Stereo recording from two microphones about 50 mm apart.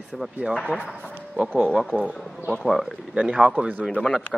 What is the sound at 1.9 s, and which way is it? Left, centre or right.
Speech, right.